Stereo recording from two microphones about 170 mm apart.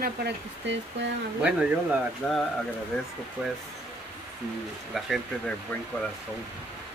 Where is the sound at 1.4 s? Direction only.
5° right (ahead or behind).